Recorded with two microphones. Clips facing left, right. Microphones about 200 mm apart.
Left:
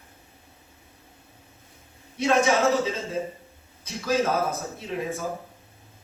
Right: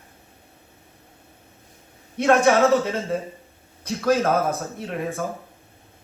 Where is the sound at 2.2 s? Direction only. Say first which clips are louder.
Right 4 dB; 60° right (ahead or behind).